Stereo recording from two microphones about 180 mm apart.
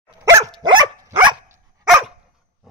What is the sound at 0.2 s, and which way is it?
Dog, 20° right (ahead or behind).